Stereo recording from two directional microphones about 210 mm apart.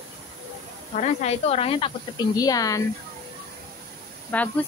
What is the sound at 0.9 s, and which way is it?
Speech, 30° left (ahead or behind).